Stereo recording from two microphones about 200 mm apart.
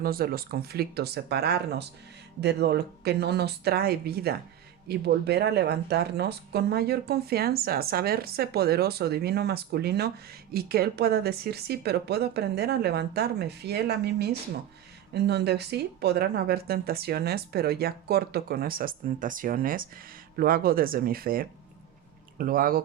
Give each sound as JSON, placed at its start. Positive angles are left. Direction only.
{"t": 0.0, "sound": "speech", "side_deg": -50}